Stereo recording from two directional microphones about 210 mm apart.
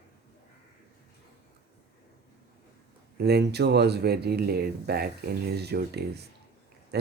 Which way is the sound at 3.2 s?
50° right (ahead or behind).